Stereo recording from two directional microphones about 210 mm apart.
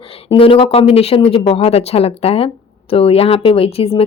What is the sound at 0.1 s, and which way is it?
Speech, 25° left (ahead or behind).